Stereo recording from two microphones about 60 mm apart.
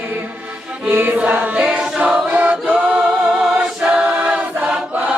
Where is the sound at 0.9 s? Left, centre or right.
Right.